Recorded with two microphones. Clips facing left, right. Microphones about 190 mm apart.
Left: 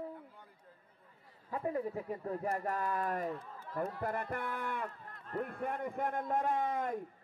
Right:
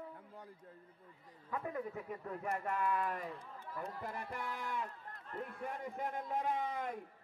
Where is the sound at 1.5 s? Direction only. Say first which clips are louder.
Left 5 dB; 30° left (ahead or behind).